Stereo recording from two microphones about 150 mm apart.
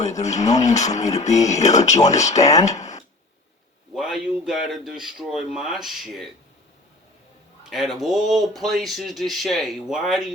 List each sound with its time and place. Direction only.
0.0 s speech: 50° left (ahead or behind)
3.9 s a sound: 5° right (ahead or behind)
4.7 s speech: centre (ahead or behind)
7.6 s speech: centre (ahead or behind)